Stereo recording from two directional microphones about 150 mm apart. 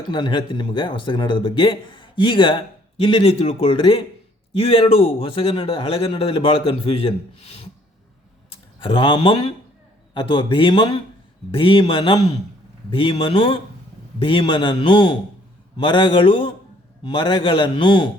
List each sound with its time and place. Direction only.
0.0 s a man's voice: 30° left (ahead or behind)
8.8 s a man's voice: 35° left (ahead or behind)